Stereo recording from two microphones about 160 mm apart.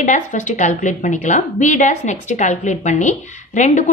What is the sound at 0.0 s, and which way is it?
A woman's voice, 50° left (ahead or behind).